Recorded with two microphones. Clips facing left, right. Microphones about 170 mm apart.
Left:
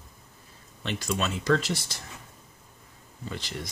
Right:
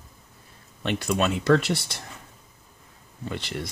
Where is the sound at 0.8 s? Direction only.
55° right (ahead or behind).